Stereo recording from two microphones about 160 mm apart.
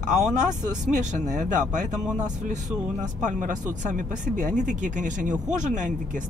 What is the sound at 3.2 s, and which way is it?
Speech, 50° right (ahead or behind).